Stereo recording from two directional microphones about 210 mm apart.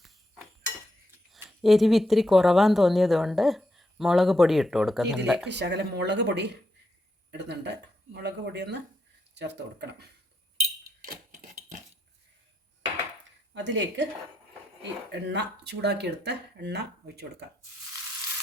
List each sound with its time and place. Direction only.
1.3 s speech: centre (ahead or behind)
5.5 s speech: 55° right (ahead or behind)
13.5 s speech: 60° right (ahead or behind)
15.1 s speech: 55° right (ahead or behind)